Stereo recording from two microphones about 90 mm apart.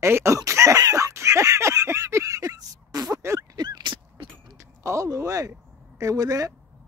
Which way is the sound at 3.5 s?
55° right (ahead or behind).